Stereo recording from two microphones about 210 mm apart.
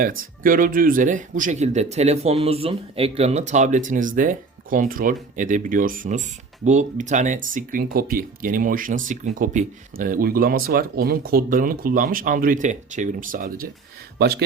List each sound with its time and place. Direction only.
0.0 s speech: 40° right (ahead or behind)